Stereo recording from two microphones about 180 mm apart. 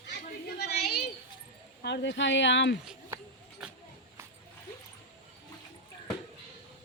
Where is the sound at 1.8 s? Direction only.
70° left (ahead or behind); by 2.8 s 85° left.